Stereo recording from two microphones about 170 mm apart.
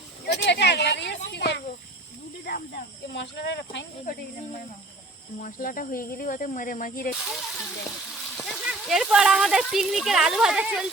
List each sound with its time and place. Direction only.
0.3 s speech: 80° left
2.4 s speech: 65° left (ahead or behind); by 3.8 s 90° left
5.4 s speech: 55° left (ahead or behind)
7.3 s speech: centre (ahead or behind)